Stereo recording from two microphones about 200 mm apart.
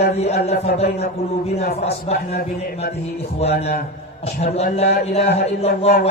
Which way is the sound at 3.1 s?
30° left (ahead or behind).